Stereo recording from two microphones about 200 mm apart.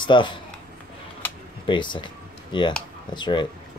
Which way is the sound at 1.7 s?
25° left (ahead or behind).